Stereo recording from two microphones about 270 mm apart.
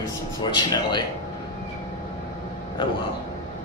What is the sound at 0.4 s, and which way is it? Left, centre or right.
Speech, centre.